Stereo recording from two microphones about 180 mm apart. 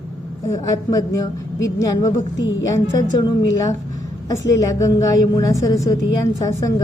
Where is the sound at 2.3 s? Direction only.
90° left.